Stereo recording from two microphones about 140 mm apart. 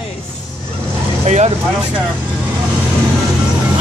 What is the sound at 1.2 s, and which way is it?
Vehicle, 50° right (ahead or behind).